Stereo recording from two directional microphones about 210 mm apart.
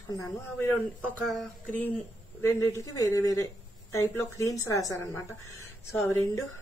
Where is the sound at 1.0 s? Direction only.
Centre (ahead or behind).